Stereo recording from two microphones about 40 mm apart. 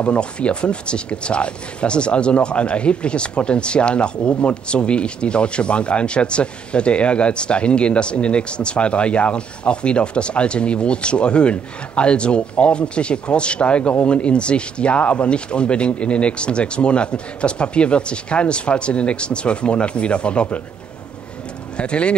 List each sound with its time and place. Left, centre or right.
0.0 s speech: left
21.7 s speech: left